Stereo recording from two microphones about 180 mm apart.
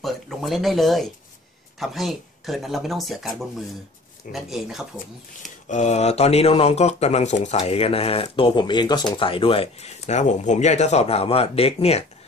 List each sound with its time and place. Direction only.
0.0 s speech: centre (ahead or behind)
5.7 s speech: 40° left (ahead or behind)